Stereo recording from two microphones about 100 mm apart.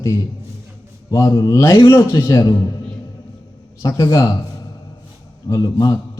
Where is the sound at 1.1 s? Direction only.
35° left (ahead or behind).